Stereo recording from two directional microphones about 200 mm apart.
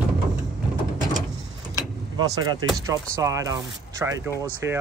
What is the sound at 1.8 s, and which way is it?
Vehicle, 20° right (ahead or behind).